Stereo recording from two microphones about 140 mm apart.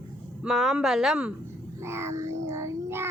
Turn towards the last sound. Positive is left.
turn(degrees=-20)  # may be behind; listen again after turning